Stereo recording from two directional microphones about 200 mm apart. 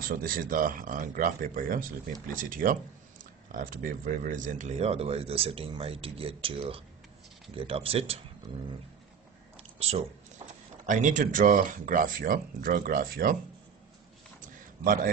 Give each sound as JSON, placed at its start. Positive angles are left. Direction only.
{"t": 0.0, "sound": "speech", "side_deg": -45}
{"t": 9.6, "sound": "speech", "side_deg": -30}